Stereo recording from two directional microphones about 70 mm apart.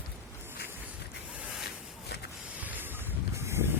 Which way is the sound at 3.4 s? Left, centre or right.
Right.